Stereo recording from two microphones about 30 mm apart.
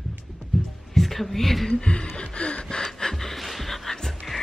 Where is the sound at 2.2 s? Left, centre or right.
Left.